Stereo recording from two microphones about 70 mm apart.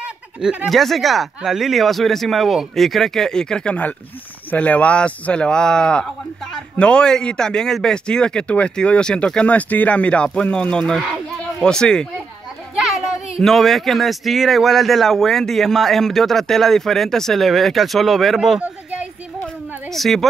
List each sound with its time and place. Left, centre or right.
0.0 s a sound: centre
0.7 s a man's voice: centre
12.7 s children playing: centre
13.4 s speech: centre
19.9 s speech: centre